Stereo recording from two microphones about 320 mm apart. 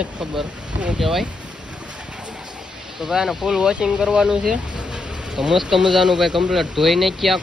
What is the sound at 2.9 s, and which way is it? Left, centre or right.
Speech, centre.